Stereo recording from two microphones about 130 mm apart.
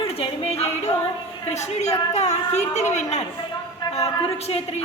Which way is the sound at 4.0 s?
50° left (ahead or behind).